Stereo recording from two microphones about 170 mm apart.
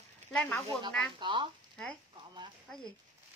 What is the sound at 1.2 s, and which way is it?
Speech, 30° right (ahead or behind).